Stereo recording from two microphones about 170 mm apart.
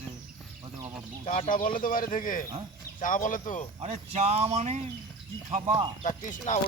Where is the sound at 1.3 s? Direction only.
50° left (ahead or behind).